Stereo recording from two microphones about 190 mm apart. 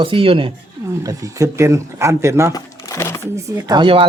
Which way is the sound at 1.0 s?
20° right (ahead or behind).